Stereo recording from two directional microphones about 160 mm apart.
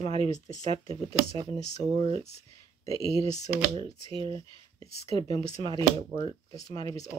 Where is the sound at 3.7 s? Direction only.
35° right (ahead or behind).